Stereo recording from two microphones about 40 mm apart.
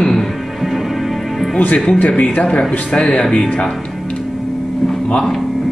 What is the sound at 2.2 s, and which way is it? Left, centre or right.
Speech, left.